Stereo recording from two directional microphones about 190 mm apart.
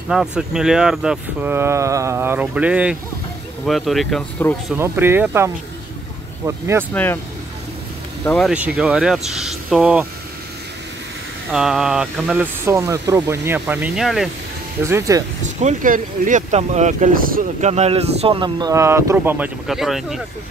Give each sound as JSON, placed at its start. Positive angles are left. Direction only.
{"t": 0.1, "sound": "speech", "side_deg": 0}
{"t": 4.7, "sound": "speech", "side_deg": -10}
{"t": 6.9, "sound": "speech", "side_deg": 10}
{"t": 8.3, "sound": "speech", "side_deg": 0}
{"t": 11.5, "sound": "speech", "side_deg": 0}
{"t": 14.9, "sound": "speech", "side_deg": -15}
{"t": 15.6, "sound": "speech", "side_deg": -45}